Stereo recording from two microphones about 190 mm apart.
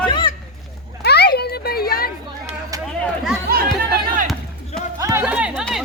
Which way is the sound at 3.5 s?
50° right (ahead or behind).